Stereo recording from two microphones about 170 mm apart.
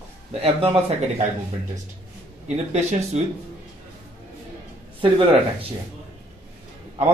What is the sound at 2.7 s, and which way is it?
Speech, 40° right (ahead or behind).